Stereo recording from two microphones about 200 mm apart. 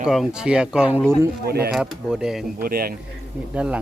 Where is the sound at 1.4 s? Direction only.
50° right (ahead or behind).